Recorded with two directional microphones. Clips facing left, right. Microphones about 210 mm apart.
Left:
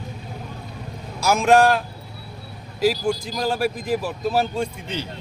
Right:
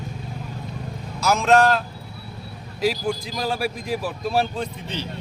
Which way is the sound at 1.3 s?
15° left (ahead or behind).